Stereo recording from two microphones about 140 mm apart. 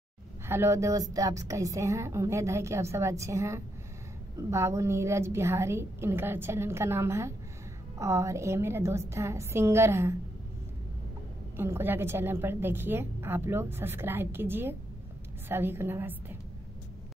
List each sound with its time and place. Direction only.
0.5 s a woman's voice: 20° right (ahead or behind)
11.5 s a woman's voice: 15° right (ahead or behind)